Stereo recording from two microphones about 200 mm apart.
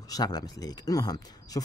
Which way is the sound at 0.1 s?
20° left (ahead or behind).